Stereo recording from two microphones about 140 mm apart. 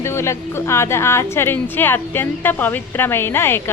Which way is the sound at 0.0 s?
20° left (ahead or behind).